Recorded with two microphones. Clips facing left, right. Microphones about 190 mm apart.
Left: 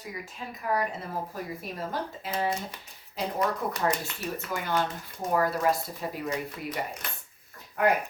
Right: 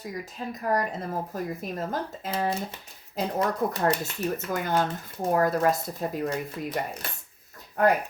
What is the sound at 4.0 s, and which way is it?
Speech, 45° right (ahead or behind).